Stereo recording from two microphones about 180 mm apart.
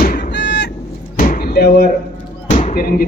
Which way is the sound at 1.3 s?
55° left (ahead or behind).